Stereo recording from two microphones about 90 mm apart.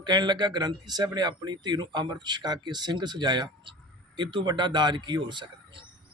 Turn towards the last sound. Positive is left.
turn(degrees=-60)  # may be behind; listen again after turning